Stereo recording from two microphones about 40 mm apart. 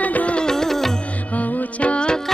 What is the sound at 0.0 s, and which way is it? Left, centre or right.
Music, left.